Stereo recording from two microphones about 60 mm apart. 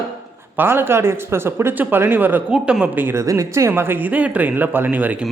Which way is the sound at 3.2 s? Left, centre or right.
Right.